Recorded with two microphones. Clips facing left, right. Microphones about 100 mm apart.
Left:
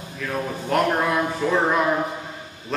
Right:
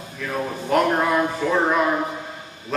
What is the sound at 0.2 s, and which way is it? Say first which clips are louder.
A man's voice: right 1 dB; centre (ahead or behind).